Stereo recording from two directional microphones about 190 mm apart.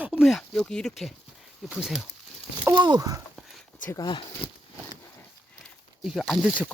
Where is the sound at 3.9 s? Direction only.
25° left (ahead or behind).